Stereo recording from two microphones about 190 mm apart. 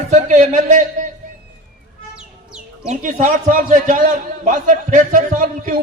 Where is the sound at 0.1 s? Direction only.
40° right (ahead or behind).